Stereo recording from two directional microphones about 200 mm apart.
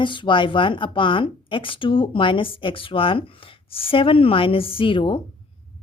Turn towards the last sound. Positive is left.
turn(degrees=25)  # may be behind; listen again after turning